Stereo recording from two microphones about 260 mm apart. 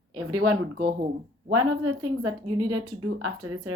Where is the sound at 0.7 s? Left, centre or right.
Right.